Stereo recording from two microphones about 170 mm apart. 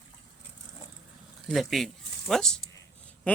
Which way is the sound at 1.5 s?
Centre (ahead or behind).